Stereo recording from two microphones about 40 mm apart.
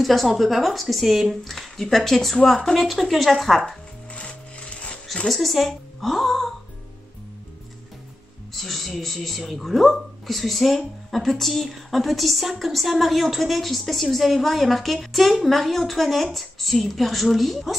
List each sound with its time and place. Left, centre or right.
0.0 s a woman's voice: centre
1.5 s a woman's voice: centre
4.1 s music: left
5.2 s a woman's voice: centre
8.5 s a woman's voice: centre